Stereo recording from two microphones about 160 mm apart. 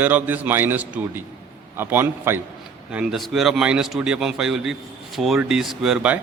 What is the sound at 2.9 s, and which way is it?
A man's voice, 5° right (ahead or behind).